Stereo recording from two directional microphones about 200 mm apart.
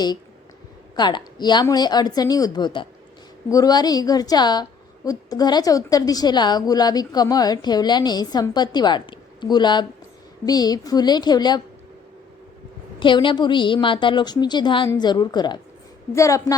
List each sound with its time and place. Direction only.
0.9 s a woman's voice: 20° left (ahead or behind)
13.0 s a woman's voice: 25° left (ahead or behind)